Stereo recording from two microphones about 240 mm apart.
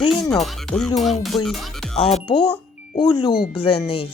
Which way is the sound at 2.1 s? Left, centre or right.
Left.